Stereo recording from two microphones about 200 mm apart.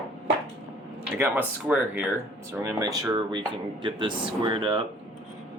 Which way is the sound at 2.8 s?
20° right (ahead or behind).